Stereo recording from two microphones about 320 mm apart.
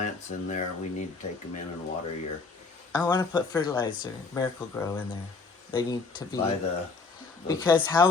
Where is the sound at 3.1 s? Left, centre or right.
Centre.